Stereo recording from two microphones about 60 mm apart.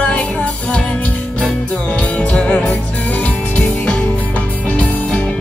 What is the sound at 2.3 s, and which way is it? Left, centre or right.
Music, centre.